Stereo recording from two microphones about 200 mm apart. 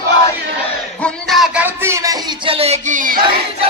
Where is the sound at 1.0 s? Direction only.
Centre (ahead or behind); by 3.2 s 40° right (ahead or behind).